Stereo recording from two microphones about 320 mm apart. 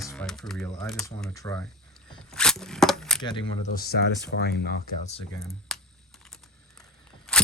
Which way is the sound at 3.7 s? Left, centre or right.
Left.